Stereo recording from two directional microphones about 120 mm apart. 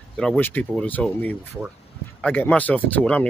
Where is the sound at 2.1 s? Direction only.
10° left (ahead or behind).